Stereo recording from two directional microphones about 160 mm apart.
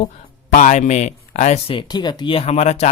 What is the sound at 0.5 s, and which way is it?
Speech, 45° left (ahead or behind).